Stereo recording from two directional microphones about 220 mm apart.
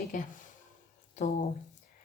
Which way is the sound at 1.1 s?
35° left (ahead or behind).